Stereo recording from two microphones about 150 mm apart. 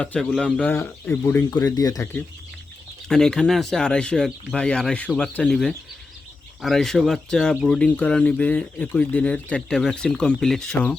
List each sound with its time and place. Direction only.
0.0 s speech: 5° left (ahead or behind)
1.5 s speech: 25° left (ahead or behind)
3.1 s speech: 5° left (ahead or behind)